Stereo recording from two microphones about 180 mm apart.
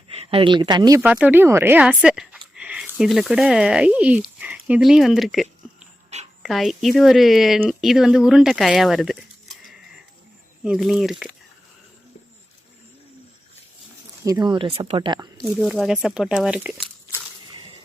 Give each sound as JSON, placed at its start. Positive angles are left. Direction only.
{"t": 0.1, "sound": "speech", "side_deg": -30}
{"t": 1.0, "sound": "speech", "side_deg": -5}
{"t": 14.3, "sound": "speech", "side_deg": -20}
{"t": 15.5, "sound": "speech", "side_deg": 0}